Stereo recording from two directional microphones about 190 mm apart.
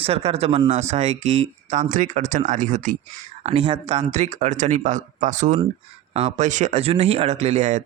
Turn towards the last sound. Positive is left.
turn(degrees=-35)  # may be behind; listen again after turning